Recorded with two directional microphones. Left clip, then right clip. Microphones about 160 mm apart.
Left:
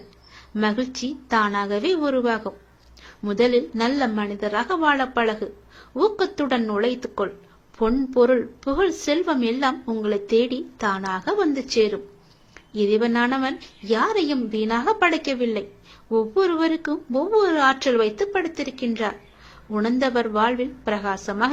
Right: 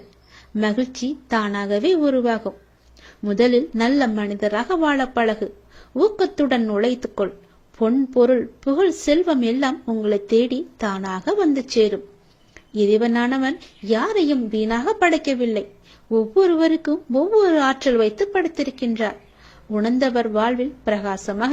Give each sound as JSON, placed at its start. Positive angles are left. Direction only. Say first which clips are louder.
{"t": 0.5, "sound": "speech", "louder": "right 1 dB", "side_deg": -45}